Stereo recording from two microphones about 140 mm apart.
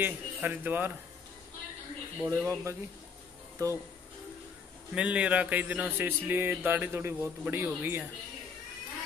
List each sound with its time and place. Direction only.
0.0 s a man's voice: 15° right (ahead or behind)
2.2 s speech: 20° right (ahead or behind)
4.9 s a man's voice: 10° right (ahead or behind)